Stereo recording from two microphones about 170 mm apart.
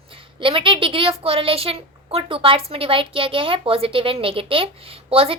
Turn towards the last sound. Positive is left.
turn(degrees=-35)  # may be behind; listen again after turning